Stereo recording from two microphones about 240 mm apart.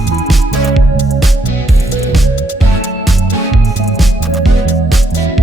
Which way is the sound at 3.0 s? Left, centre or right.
Centre.